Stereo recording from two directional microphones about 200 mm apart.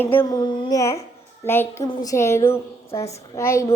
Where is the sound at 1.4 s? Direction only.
10° left (ahead or behind).